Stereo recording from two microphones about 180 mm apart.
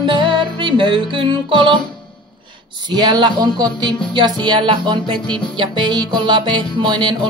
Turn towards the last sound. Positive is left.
turn(degrees=-25)  # may be behind; listen again after turning